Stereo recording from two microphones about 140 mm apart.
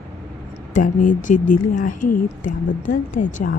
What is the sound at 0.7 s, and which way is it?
Speech, 65° left (ahead or behind).